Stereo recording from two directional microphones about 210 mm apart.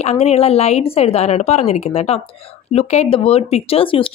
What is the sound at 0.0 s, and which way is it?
A woman's voice, 30° left (ahead or behind).